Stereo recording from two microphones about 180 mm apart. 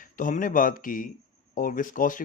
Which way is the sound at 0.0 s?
45° left (ahead or behind).